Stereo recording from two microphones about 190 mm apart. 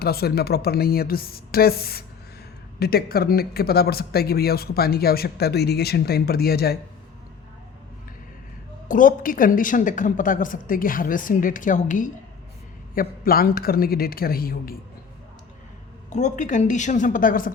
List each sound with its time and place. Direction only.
0.0 s a woman's voice: 55° left (ahead or behind)
8.9 s a woman's voice: 45° left (ahead or behind)
16.0 s a woman's voice: 40° left (ahead or behind)